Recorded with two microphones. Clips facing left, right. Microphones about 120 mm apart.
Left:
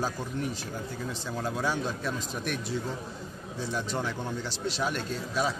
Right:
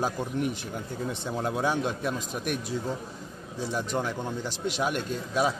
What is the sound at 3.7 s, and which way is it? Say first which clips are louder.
Speech: right 3 dB; 15° right (ahead or behind).